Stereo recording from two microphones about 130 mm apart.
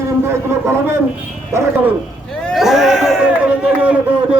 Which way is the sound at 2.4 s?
Centre (ahead or behind).